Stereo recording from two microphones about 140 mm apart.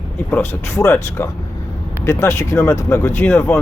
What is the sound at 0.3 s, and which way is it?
Speech, 20° left (ahead or behind).